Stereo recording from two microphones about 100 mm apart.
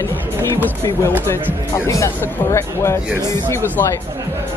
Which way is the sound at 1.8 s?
30° left (ahead or behind).